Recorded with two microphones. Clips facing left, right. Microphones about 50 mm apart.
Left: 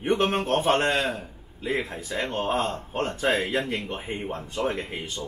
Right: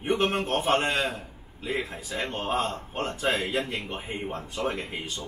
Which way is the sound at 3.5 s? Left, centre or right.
Left.